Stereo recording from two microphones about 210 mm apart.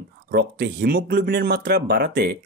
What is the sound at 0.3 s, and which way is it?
Speech, 50° right (ahead or behind).